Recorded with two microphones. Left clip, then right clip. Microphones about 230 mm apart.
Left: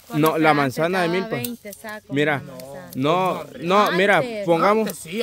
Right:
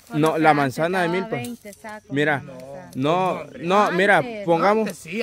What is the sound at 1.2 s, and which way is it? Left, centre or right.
Speech, left.